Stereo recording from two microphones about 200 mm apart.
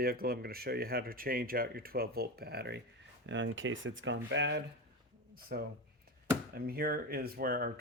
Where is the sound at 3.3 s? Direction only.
70° right (ahead or behind).